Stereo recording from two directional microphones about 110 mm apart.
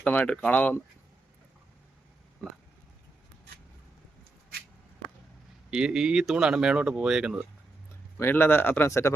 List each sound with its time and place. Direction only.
0.0 s speech: 10° left (ahead or behind)
5.7 s speech: 5° right (ahead or behind)
8.2 s speech: 20° left (ahead or behind)